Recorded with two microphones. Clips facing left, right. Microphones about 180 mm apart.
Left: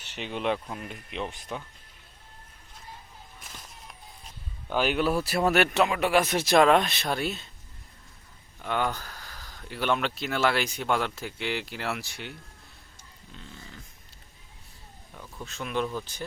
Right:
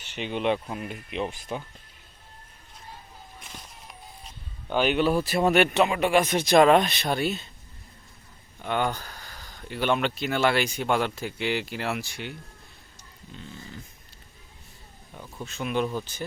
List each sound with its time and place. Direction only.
0.0 s speech: centre (ahead or behind)
4.7 s speech: centre (ahead or behind)
8.6 s speech: centre (ahead or behind)
15.1 s speech: 15° right (ahead or behind)
15.4 s speech: centre (ahead or behind)